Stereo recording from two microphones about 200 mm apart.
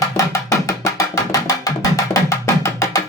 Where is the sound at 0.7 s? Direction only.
15° left (ahead or behind).